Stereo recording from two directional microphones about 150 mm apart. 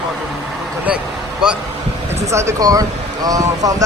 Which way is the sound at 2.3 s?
20° right (ahead or behind).